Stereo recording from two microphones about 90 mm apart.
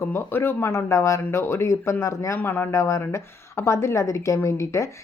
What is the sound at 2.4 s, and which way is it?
Speech, 25° left (ahead or behind).